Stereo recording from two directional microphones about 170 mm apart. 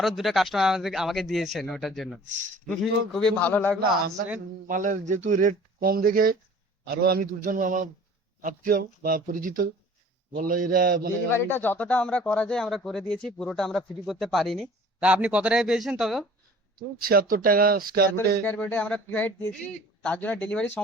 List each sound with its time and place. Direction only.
0.2 s a man's voice: centre (ahead or behind)
4.6 s speech: 50° right (ahead or behind)
11.3 s speech: 15° left (ahead or behind); by 16.2 s centre (ahead or behind)
16.7 s speech: 60° right (ahead or behind)
18.4 s a man's voice: 10° left (ahead or behind)